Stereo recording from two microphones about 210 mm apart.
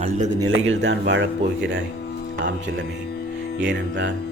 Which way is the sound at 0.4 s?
65° right (ahead or behind).